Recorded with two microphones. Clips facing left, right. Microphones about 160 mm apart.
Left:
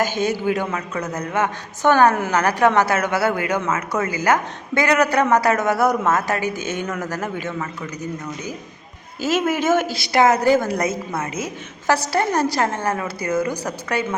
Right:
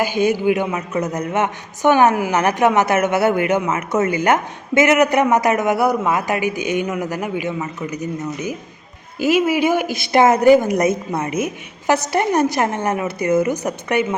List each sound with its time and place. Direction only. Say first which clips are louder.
0.0 s a man's voice: right 4 dB; 15° right (ahead or behind)